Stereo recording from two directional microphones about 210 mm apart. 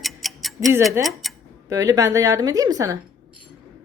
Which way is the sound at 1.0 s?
10° right (ahead or behind).